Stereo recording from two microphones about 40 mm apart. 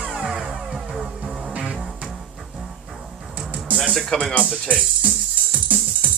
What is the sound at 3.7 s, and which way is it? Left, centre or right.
Music, left.